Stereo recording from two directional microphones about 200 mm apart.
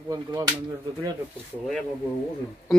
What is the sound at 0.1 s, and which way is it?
Speech, 20° right (ahead or behind).